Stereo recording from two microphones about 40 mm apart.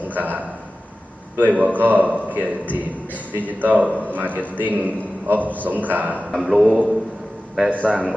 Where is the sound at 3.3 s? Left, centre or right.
Right.